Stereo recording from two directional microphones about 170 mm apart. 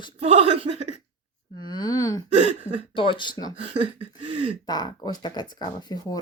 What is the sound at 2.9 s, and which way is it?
Speech, 30° left (ahead or behind).